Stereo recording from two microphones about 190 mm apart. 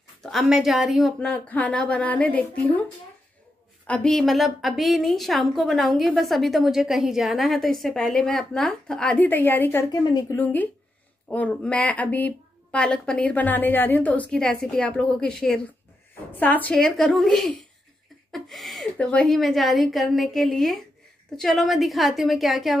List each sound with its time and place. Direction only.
0.2 s a woman's voice: centre (ahead or behind)
9.8 s speech: 20° left (ahead or behind)
10.3 s a woman's voice: 10° left (ahead or behind)